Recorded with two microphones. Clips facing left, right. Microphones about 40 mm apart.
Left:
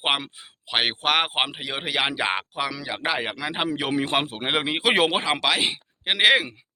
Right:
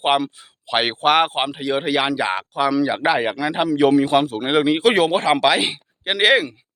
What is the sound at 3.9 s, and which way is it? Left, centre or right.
Speech, left.